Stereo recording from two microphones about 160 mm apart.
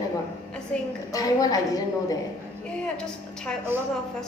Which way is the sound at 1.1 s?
25° left (ahead or behind).